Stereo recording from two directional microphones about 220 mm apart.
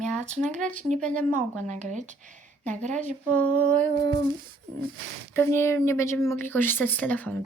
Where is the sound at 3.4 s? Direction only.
10° left (ahead or behind).